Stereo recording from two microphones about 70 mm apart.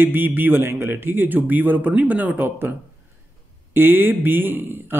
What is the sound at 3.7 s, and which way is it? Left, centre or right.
Speech, right.